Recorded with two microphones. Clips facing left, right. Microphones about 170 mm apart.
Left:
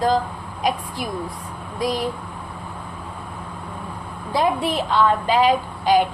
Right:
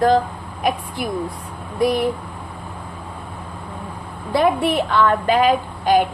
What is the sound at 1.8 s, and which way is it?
Speech, 60° right (ahead or behind).